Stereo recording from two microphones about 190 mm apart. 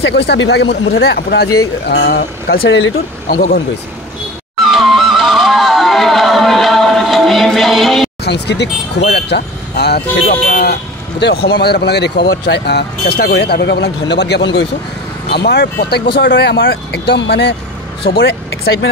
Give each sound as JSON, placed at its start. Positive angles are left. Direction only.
{"t": 0.0, "sound": "speech", "side_deg": 65}
{"t": 4.6, "sound": "music", "side_deg": 0}
{"t": 8.2, "sound": "speech", "side_deg": 60}
{"t": 10.2, "sound": "speech", "side_deg": 35}
{"t": 10.6, "sound": "speech", "side_deg": 60}